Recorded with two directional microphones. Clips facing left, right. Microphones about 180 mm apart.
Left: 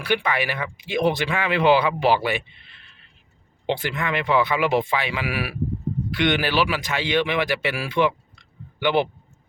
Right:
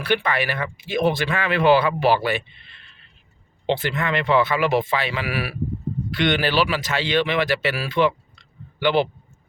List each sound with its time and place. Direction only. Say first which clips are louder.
0.0 s speech: right 1 dB; 10° left (ahead or behind)
3.7 s speech: right 2 dB; 10° left (ahead or behind)